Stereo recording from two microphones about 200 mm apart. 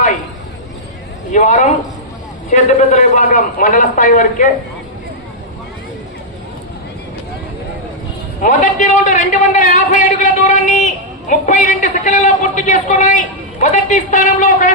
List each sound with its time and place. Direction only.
1.3 s a man's voice: 40° left (ahead or behind)
8.4 s a man's voice: 40° left (ahead or behind)